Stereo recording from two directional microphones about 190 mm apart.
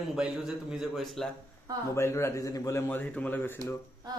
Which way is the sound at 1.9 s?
15° left (ahead or behind).